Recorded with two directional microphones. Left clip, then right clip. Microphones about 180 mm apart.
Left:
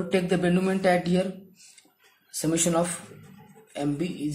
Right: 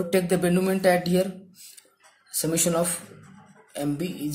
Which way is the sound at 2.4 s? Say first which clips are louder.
Even; 10° right (ahead or behind).